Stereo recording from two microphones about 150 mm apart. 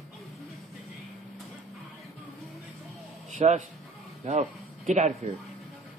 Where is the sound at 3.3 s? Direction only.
55° right (ahead or behind).